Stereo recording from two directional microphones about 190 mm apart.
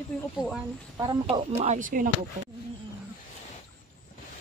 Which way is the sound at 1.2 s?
30° right (ahead or behind).